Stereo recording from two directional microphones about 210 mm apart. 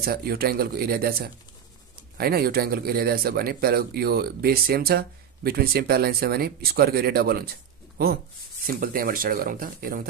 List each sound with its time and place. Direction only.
0.0 s speech: 45° right (ahead or behind)
8.6 s speech: 45° right (ahead or behind)